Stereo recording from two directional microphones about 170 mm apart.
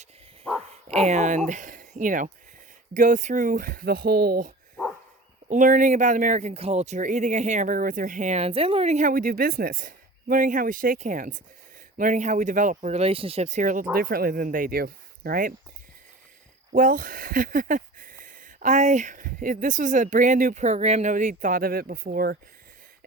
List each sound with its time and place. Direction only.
0.7 s speech: 40° right (ahead or behind); by 15.5 s 55° right (ahead or behind)
16.7 s speech: 55° right (ahead or behind)